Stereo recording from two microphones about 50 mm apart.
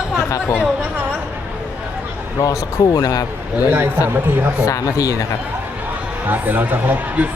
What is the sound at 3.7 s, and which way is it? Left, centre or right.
Speech, right.